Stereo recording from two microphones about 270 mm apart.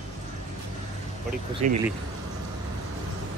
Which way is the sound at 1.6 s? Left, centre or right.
Right.